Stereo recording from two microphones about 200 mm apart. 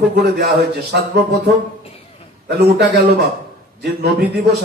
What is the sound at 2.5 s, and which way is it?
A man's voice, 50° right (ahead or behind).